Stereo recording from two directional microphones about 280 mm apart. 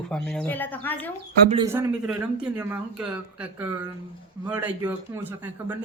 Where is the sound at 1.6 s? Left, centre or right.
Centre.